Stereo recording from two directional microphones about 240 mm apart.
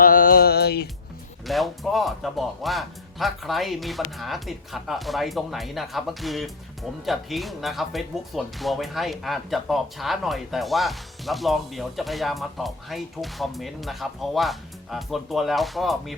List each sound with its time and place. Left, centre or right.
0.0 s music: left
1.5 s speech: centre